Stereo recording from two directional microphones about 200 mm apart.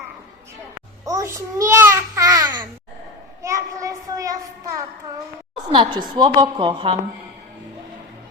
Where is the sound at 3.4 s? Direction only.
15° right (ahead or behind).